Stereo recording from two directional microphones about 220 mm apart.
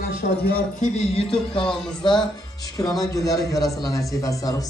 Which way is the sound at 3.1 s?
15° left (ahead or behind).